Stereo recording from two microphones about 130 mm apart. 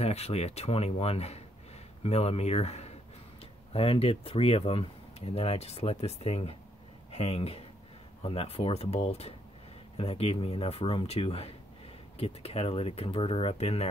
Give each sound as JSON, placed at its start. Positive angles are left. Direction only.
{"t": 0.0, "sound": "speech", "side_deg": 55}